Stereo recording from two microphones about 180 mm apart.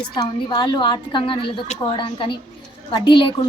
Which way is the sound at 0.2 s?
25° left (ahead or behind).